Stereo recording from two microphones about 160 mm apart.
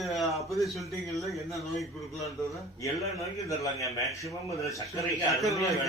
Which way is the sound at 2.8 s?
20° left (ahead or behind).